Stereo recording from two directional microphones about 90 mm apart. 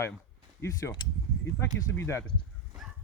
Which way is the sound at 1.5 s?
30° left (ahead or behind).